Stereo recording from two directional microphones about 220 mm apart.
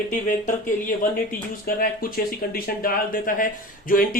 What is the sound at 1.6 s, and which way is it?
Speech, 40° left (ahead or behind).